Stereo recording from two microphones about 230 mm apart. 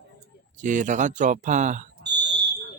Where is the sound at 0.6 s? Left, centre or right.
Right.